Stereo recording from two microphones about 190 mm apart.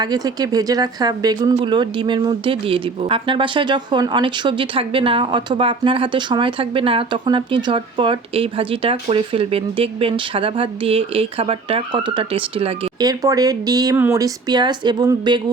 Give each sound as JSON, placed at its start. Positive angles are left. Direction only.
{"t": 0.0, "sound": "speech", "side_deg": -20}
{"t": 13.1, "sound": "speech", "side_deg": -20}